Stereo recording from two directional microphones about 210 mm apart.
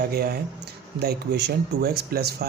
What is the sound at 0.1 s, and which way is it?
A man's voice, 50° right (ahead or behind).